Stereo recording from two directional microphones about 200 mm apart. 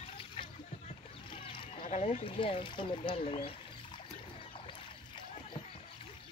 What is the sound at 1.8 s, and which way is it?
Speech, 35° left (ahead or behind).